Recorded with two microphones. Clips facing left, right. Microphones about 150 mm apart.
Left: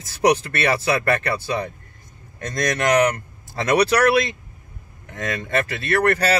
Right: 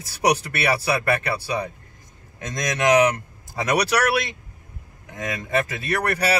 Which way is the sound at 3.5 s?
10° right (ahead or behind).